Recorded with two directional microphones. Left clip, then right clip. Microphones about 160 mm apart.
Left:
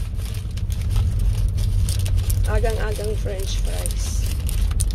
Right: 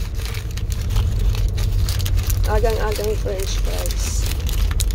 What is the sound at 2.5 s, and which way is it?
Speech, centre (ahead or behind).